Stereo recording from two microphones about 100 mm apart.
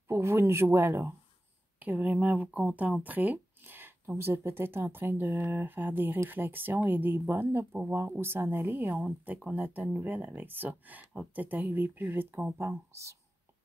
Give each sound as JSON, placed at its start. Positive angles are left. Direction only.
{"t": 0.1, "sound": "speech", "side_deg": -25}